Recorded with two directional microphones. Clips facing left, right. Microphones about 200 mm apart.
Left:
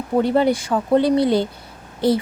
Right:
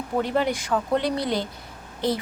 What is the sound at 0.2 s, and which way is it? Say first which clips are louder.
A woman's voice: left 7 dB; 35° left (ahead or behind).